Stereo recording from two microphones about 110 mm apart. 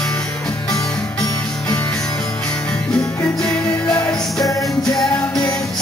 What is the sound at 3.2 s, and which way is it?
Music, 20° left (ahead or behind).